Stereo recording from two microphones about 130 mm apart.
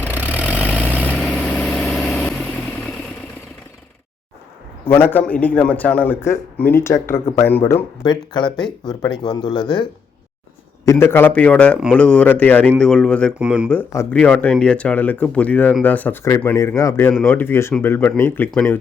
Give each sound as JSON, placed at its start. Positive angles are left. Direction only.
{"t": 0.0, "sound": "vehicle", "side_deg": -15}
{"t": 0.6, "sound": "vehicle", "side_deg": 15}
{"t": 5.0, "sound": "a man's voice", "side_deg": 15}
{"t": 8.0, "sound": "speech", "side_deg": 35}
{"t": 11.0, "sound": "a man's voice", "side_deg": 15}
{"t": 13.4, "sound": "speech", "side_deg": -10}
{"t": 13.9, "sound": "speech", "side_deg": 20}
{"t": 14.2, "sound": "a man's voice", "side_deg": 10}